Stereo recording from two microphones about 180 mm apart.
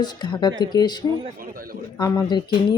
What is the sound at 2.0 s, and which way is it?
Speech, 25° left (ahead or behind).